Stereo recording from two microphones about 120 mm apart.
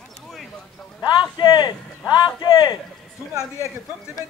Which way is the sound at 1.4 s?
40° left (ahead or behind).